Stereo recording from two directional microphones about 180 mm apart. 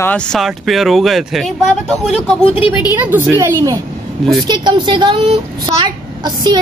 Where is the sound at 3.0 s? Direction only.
10° right (ahead or behind).